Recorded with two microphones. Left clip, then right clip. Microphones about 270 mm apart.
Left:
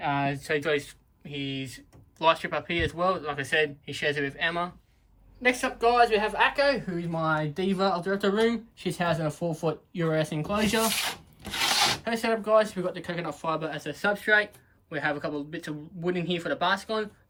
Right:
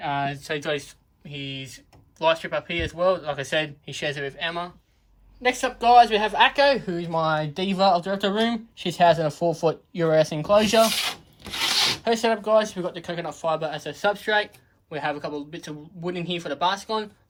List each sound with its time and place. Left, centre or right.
0.0 s speech: centre
10.9 s rub: centre
12.0 s speech: centre